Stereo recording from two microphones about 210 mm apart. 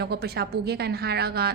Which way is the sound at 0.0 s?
50° right (ahead or behind).